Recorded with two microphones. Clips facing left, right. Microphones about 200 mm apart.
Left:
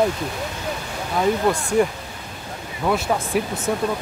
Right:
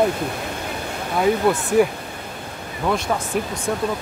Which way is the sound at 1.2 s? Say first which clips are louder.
Right 2 dB; 5° right (ahead or behind).